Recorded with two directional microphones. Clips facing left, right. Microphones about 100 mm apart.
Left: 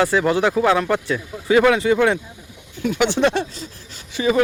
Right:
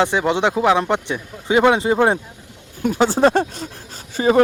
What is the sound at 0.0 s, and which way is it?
Speech, 20° right (ahead or behind).